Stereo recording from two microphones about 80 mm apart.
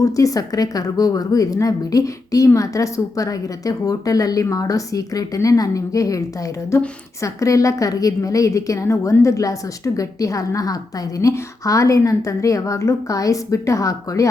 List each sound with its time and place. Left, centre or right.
0.0 s a woman's voice: left